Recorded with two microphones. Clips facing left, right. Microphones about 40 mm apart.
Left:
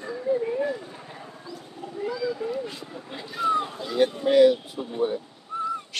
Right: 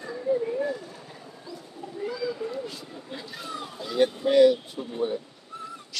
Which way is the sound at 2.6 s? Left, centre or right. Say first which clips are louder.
Left 2 dB; left.